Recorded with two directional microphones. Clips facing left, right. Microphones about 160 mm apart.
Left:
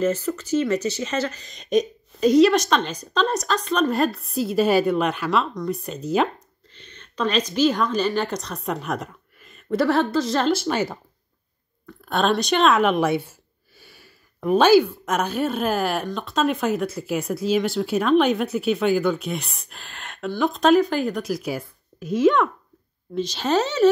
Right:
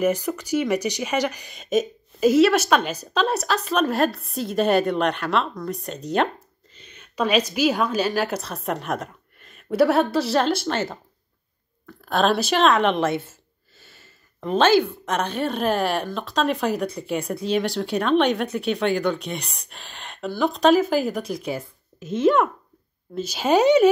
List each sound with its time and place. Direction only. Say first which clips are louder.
0.0 s a woman's voice: even; 15° right (ahead or behind)
11.8 s a woman's voice: right 1 dB; centre (ahead or behind)
22.0 s speech: left 2 dB; 25° right (ahead or behind)
23.1 s a woman's voice: right 2 dB; 10° right (ahead or behind)